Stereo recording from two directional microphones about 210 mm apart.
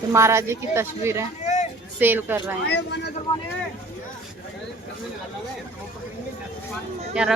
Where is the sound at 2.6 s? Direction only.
55° left (ahead or behind).